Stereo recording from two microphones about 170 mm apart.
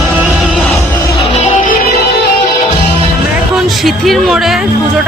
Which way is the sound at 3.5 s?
Centre (ahead or behind).